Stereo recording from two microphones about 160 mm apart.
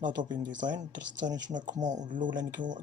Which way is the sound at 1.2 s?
50° right (ahead or behind).